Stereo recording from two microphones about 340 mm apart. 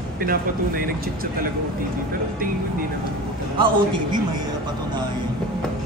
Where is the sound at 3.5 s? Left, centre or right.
Centre.